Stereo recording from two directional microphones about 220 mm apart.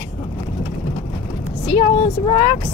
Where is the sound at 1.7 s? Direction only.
25° left (ahead or behind).